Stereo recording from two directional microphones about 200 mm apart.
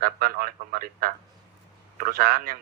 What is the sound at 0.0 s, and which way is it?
A man's voice, 45° right (ahead or behind).